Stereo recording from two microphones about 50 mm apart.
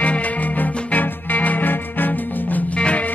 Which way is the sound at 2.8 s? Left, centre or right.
Left.